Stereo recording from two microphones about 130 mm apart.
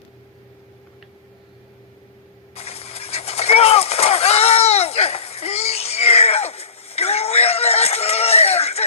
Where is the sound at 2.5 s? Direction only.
50° left (ahead or behind).